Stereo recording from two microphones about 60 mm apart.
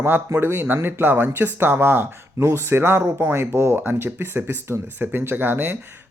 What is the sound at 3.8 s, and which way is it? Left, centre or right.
Speech, right.